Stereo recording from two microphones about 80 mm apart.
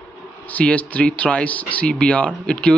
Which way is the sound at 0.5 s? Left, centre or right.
Centre.